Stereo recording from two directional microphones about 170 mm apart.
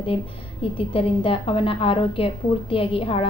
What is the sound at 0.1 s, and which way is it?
A woman's voice, 30° left (ahead or behind).